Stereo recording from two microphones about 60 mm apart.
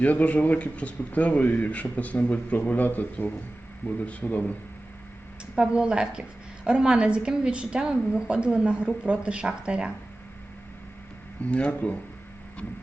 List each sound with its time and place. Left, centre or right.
0.0 s speech: left
5.5 s a woman's voice: centre
11.4 s speech: left